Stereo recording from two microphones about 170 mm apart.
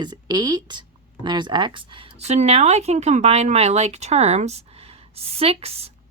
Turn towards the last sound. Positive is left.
turn(degrees=-35)  # may be behind; listen again after turning